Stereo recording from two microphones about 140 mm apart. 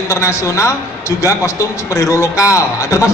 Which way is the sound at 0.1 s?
20° left (ahead or behind).